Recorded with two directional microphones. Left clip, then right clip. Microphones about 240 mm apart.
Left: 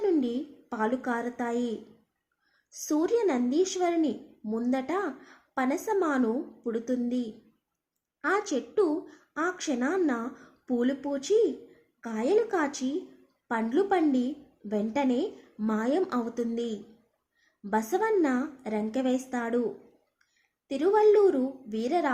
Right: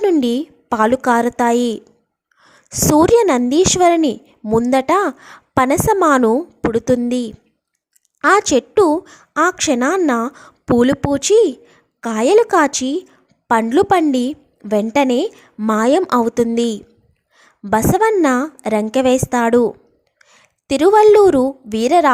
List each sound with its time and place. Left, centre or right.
0.0 s a woman's voice: right
20.7 s a woman's voice: right